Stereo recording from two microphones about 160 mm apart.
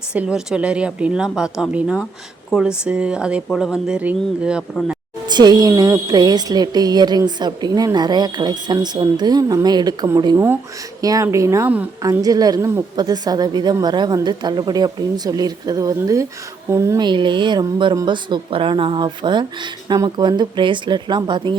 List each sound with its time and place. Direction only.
0.1 s speech: 5° right (ahead or behind)
5.3 s a woman's voice: 25° right (ahead or behind)
12.0 s a woman's voice: 20° right (ahead or behind)
17.1 s a woman's voice: 30° right (ahead or behind)